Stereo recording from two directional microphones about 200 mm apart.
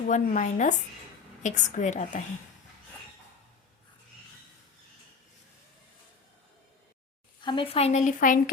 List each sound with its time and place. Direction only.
0.1 s speech: 40° left (ahead or behind)
7.4 s speech: 25° left (ahead or behind)